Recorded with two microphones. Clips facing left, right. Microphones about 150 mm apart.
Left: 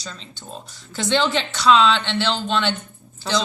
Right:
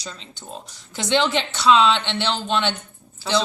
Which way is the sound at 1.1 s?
20° right (ahead or behind).